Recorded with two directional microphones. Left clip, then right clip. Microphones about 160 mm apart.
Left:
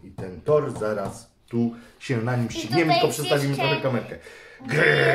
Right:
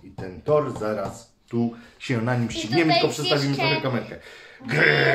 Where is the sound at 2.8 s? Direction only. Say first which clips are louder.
Even; 15° left (ahead or behind).